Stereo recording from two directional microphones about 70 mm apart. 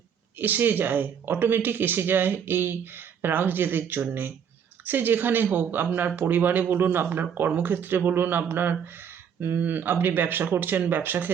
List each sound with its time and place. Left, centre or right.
0.3 s speech: right